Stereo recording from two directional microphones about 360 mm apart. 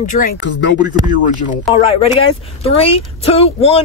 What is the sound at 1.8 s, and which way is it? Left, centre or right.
Speech, centre.